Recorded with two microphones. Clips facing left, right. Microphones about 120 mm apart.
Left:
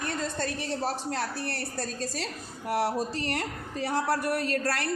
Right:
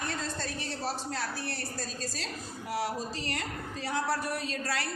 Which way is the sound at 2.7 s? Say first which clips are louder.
Left 6 dB; 70° left (ahead or behind).